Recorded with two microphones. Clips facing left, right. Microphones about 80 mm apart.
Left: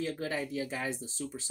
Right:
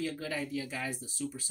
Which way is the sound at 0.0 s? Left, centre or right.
Left.